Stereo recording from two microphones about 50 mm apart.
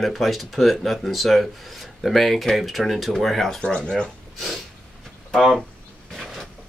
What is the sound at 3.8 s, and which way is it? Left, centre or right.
Speech, centre.